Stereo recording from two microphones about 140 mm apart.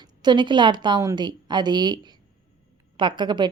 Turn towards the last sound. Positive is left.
turn(degrees=-35)  # may be behind; listen again after turning